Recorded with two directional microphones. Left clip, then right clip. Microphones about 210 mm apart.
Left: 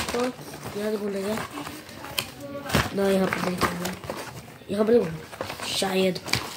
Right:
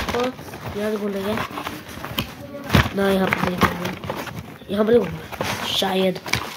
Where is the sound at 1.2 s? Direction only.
20° right (ahead or behind).